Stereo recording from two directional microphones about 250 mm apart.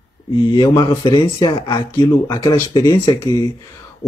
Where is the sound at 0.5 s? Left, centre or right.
Centre.